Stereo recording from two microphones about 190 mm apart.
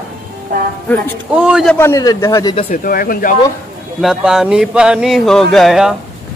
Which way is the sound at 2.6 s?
50° left (ahead or behind).